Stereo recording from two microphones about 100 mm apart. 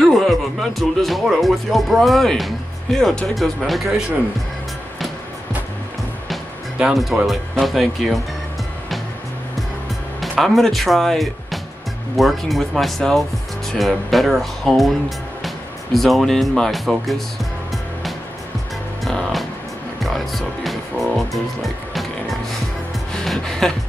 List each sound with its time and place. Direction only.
0.0 s speech: centre (ahead or behind)
6.2 s speech: centre (ahead or behind)
10.4 s speech: centre (ahead or behind)
19.0 s music: centre (ahead or behind)
23.1 s music: 5° left (ahead or behind)